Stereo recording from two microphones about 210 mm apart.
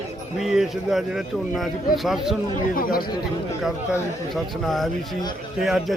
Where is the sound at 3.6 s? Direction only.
Centre (ahead or behind).